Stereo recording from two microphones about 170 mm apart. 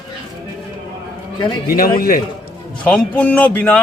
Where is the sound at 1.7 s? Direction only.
60° left (ahead or behind).